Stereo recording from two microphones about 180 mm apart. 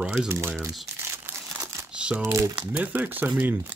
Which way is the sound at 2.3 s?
20° right (ahead or behind).